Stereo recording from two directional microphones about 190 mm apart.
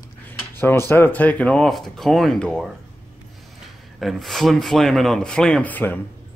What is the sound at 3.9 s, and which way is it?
Speech, centre (ahead or behind).